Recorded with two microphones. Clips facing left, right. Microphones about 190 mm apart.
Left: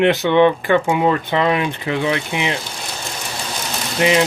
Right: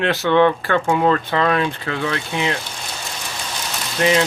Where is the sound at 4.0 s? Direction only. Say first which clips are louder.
Left 1 dB; 15° left (ahead or behind).